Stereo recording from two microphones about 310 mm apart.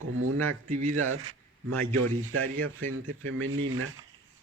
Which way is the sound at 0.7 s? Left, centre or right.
Right.